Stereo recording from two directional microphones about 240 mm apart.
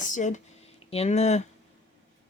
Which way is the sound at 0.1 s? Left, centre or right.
Left.